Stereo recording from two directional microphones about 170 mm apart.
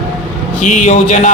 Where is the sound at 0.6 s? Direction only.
45° left (ahead or behind).